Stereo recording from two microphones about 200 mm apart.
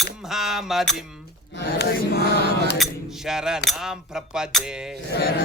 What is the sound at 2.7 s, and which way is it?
Speech, centre (ahead or behind).